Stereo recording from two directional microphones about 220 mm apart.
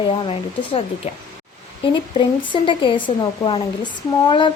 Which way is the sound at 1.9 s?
20° left (ahead or behind).